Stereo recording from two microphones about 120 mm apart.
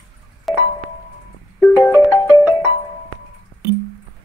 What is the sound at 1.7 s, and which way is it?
Music, 25° left (ahead or behind).